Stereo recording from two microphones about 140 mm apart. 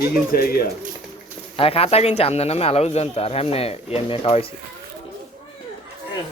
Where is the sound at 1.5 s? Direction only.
45° left (ahead or behind).